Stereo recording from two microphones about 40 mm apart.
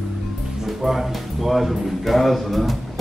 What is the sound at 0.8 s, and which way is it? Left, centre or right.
Speech, centre.